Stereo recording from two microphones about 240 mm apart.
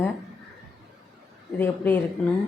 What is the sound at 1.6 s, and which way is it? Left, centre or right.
Speech, centre.